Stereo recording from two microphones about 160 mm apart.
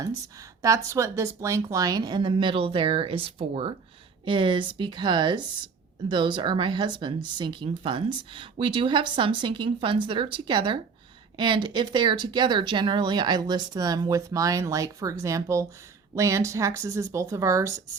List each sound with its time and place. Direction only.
0.6 s a woman's voice: 20° right (ahead or behind)